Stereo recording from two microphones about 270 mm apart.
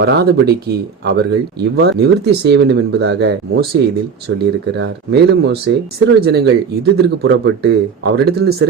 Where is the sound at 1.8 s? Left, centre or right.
Right.